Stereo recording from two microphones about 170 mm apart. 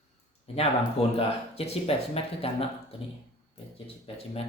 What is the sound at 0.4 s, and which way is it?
A man's voice, 35° left (ahead or behind).